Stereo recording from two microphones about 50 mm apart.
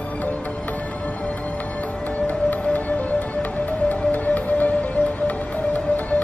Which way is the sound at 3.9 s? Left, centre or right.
Left.